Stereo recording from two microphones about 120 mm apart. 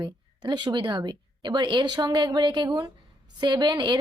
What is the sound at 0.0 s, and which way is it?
A woman's voice, 40° right (ahead or behind).